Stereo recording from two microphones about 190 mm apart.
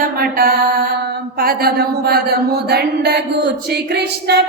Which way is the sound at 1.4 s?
55° right (ahead or behind).